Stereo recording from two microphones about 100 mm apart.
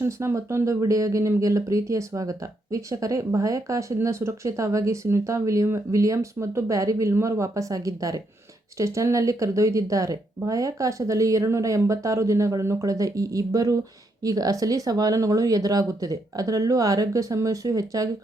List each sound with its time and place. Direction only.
0.0 s speech: 30° right (ahead or behind)